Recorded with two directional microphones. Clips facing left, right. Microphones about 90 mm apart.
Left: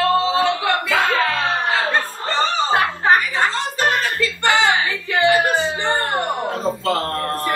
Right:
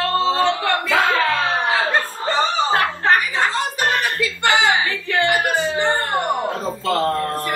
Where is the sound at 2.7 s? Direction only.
10° left (ahead or behind).